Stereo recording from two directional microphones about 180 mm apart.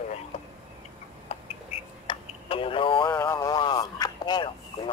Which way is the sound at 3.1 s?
15° left (ahead or behind).